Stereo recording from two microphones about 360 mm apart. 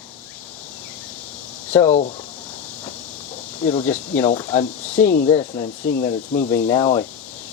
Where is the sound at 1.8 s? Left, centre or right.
Centre.